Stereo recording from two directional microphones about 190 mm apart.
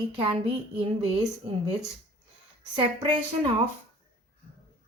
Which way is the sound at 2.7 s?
25° right (ahead or behind).